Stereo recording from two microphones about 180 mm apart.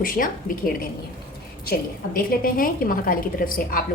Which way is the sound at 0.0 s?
50° left (ahead or behind).